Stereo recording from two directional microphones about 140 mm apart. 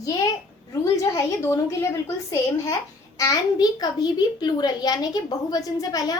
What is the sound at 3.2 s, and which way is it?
A child's voice, 30° left (ahead or behind).